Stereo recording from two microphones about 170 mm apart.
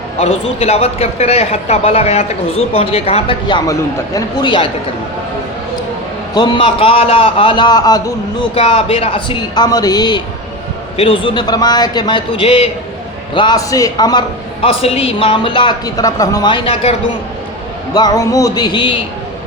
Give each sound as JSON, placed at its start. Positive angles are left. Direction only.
{"t": 0.2, "sound": "a man's voice", "side_deg": 35}
{"t": 3.4, "sound": "a man's voice", "side_deg": 20}
{"t": 6.3, "sound": "a man's voice", "side_deg": 25}
{"t": 8.5, "sound": "a man's voice", "side_deg": 35}
{"t": 17.9, "sound": "a man's voice", "side_deg": 25}